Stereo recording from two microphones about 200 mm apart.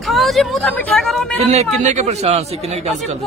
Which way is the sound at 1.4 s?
35° right (ahead or behind).